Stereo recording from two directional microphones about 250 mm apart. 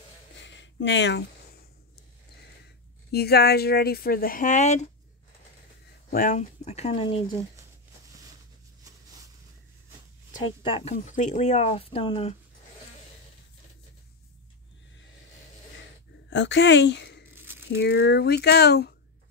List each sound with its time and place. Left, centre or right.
0.4 s a sound: left
2.6 s speech: left
6.0 s speech: left
8.8 s a sound: centre
10.6 s speech: left
16.3 s a woman's voice: left